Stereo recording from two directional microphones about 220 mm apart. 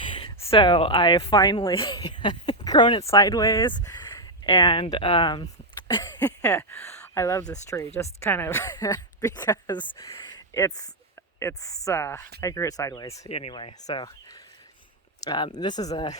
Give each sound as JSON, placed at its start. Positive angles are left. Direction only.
{"t": 0.0, "sound": "speech", "side_deg": 25}
{"t": 13.2, "sound": "speech", "side_deg": 25}